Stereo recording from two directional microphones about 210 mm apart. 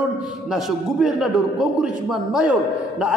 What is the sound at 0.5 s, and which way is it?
A man's voice, centre (ahead or behind).